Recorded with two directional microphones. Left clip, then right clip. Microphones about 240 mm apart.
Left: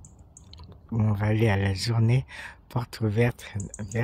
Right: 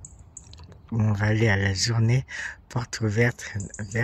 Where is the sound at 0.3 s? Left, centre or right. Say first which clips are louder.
Even; centre.